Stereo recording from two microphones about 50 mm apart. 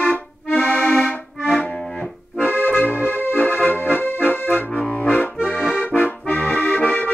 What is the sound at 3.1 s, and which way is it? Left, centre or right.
Accordion, left.